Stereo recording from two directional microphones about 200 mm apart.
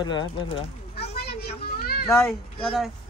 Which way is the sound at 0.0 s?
20° left (ahead or behind).